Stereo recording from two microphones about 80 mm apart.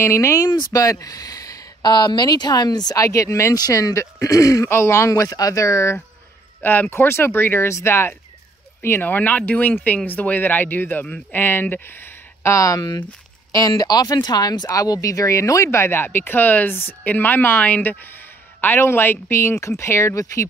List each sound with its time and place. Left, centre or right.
0.0 s speech: left
0.5 s speech: left
0.8 s speech: left
1.8 s speech: left
3.5 s speech: left
6.6 s speech: left
12.5 s speech: left